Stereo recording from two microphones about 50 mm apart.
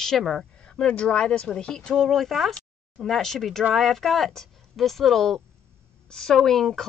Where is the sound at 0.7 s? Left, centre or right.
Left.